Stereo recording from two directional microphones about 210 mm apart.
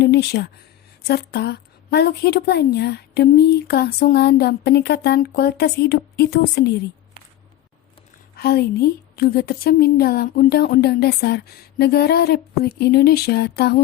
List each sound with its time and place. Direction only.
0.0 s a woman's voice: 50° left (ahead or behind)
8.4 s a woman's voice: 45° left (ahead or behind)